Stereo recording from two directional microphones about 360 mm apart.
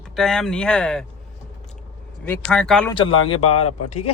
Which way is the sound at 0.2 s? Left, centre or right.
Centre.